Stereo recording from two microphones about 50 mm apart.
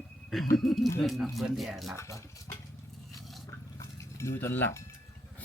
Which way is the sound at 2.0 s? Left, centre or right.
Left.